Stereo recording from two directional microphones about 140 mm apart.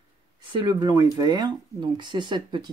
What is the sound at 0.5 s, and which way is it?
Speech, 30° right (ahead or behind).